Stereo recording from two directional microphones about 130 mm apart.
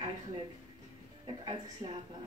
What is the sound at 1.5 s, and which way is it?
Speech, 35° right (ahead or behind).